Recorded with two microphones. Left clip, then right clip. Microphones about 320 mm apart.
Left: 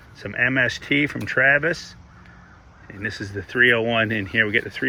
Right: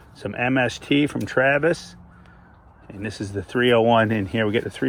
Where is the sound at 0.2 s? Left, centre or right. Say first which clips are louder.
Left 2 dB; centre.